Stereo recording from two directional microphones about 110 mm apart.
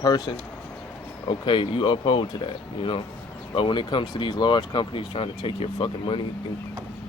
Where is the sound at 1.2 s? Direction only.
50° left (ahead or behind).